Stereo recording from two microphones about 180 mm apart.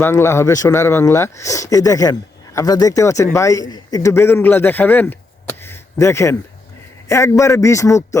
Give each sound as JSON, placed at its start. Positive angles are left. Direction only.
{"t": 0.0, "sound": "speech", "side_deg": 15}